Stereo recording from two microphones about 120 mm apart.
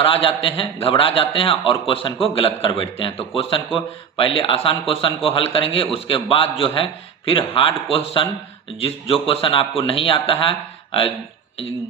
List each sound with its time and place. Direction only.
0.0 s a man's voice: 50° left (ahead or behind)